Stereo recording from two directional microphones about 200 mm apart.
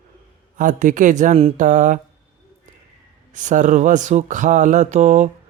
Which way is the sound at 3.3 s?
40° right (ahead or behind).